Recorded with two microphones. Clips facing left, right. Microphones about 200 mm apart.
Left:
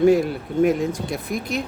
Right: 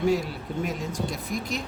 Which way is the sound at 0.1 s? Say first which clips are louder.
Left 8 dB; 55° left (ahead or behind).